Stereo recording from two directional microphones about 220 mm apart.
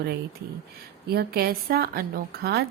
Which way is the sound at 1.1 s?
45° right (ahead or behind).